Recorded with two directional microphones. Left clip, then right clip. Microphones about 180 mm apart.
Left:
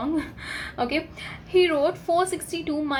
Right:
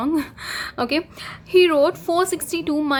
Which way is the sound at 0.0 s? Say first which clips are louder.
Right 5 dB; 55° right (ahead or behind).